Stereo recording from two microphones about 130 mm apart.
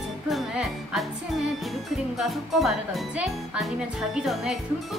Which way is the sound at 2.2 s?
Centre (ahead or behind).